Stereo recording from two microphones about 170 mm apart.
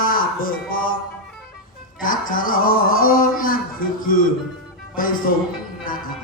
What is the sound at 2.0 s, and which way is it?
Speech, 55° left (ahead or behind).